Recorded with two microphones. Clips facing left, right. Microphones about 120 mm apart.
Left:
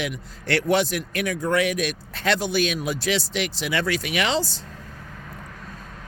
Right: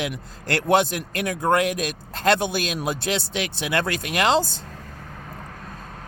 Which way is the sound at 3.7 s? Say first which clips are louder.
Right 1 dB; 45° right (ahead or behind).